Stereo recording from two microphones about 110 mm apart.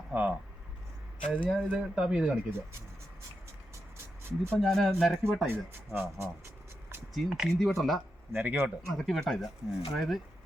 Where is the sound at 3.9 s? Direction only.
25° right (ahead or behind).